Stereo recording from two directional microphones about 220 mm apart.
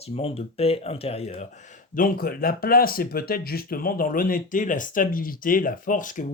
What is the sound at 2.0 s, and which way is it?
Speech, 40° left (ahead or behind).